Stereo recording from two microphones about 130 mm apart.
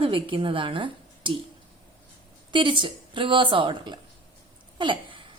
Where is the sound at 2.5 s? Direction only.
40° right (ahead or behind).